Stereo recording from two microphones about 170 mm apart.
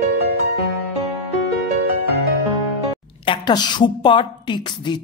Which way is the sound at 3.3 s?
25° left (ahead or behind).